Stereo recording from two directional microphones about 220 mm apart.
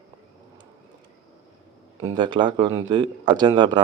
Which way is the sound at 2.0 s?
15° right (ahead or behind).